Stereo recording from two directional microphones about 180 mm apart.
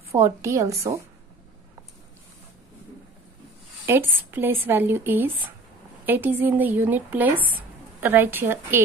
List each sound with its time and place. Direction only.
0.1 s speech: 15° right (ahead or behind)
3.8 s a woman's voice: 10° right (ahead or behind)